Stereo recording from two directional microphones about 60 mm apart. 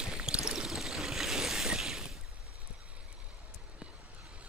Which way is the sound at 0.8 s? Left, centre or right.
Centre.